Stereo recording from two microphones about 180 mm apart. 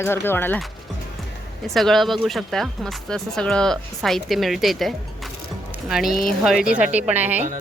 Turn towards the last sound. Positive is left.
turn(degrees=-10)  # may be behind; listen again after turning